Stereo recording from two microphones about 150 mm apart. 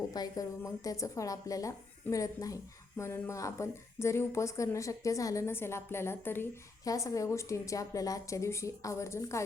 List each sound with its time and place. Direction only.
0.1 s a woman's voice: 25° left (ahead or behind)